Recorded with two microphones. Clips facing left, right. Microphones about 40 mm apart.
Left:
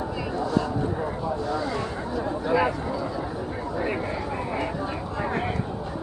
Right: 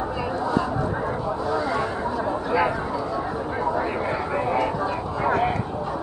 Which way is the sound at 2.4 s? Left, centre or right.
Centre.